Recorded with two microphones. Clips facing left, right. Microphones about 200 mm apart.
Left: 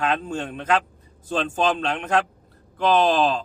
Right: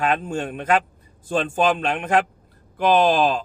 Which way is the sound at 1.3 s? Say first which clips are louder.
Right 2 dB; 10° right (ahead or behind).